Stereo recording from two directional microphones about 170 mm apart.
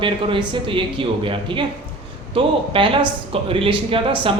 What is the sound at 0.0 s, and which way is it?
Speech, 30° right (ahead or behind).